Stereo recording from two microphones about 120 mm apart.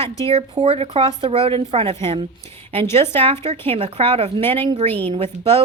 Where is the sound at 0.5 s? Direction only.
50° right (ahead or behind).